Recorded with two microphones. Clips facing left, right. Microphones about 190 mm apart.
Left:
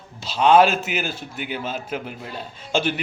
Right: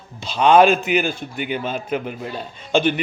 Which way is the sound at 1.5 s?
55° right (ahead or behind).